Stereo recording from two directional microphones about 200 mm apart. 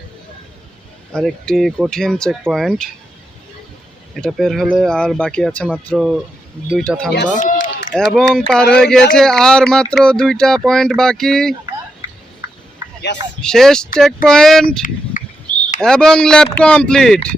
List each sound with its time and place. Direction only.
1.1 s speech: centre (ahead or behind)
4.1 s speech: centre (ahead or behind)
7.3 s speech: 40° left (ahead or behind)
8.1 s speech: 5° left (ahead or behind)
13.1 s speech: 60° left (ahead or behind)
13.4 s speech: centre (ahead or behind)
15.1 s a sound: 40° left (ahead or behind)
15.8 s speech: 5° left (ahead or behind)